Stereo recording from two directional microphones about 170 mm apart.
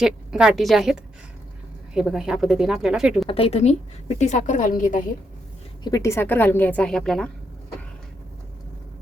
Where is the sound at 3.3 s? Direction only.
35° left (ahead or behind); by 5.0 s 50° left (ahead or behind).